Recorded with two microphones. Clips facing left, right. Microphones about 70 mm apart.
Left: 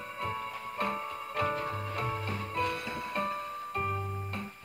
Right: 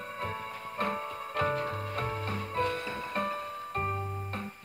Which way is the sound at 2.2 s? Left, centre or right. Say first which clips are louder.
Right 1 dB; right.